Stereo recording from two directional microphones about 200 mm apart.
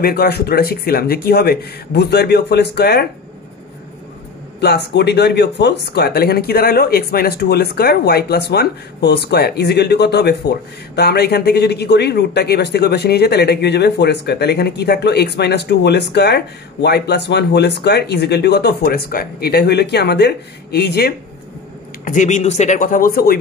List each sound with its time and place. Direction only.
0.0 s speech: 50° left (ahead or behind)
4.6 s speech: 55° left (ahead or behind)
22.0 s speech: 40° left (ahead or behind)